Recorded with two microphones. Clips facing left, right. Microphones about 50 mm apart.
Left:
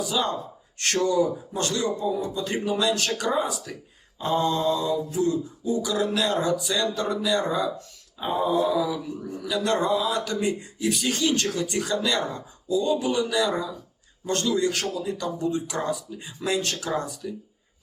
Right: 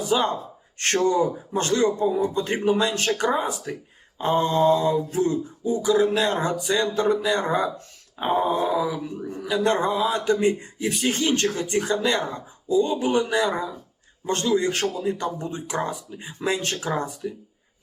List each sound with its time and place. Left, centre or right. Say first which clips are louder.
0.0 s speech: right 4 dB; right
0.8 s a sound: right 2 dB; right
14.3 s a man's voice: right 2 dB; right